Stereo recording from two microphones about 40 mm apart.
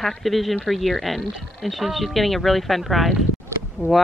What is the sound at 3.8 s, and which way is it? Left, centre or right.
Speech, left.